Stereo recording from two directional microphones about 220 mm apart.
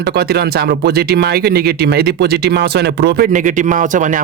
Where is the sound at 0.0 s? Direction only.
45° right (ahead or behind).